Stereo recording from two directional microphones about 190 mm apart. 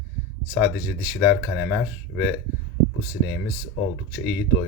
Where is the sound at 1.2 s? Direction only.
5° right (ahead or behind).